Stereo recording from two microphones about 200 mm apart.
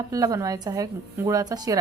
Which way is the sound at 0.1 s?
15° right (ahead or behind).